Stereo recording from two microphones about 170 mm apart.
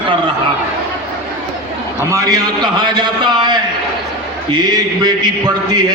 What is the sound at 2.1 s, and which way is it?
A man's voice, 20° right (ahead or behind).